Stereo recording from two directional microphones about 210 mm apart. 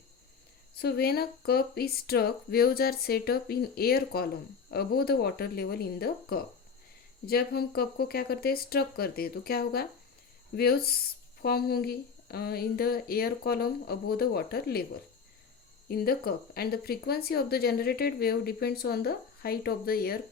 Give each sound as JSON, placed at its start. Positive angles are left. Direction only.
{"t": 0.8, "sound": "speech", "side_deg": 50}
{"t": 15.9, "sound": "speech", "side_deg": 45}